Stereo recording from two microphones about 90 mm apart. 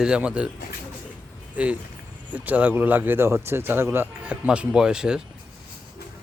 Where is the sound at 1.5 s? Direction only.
15° right (ahead or behind).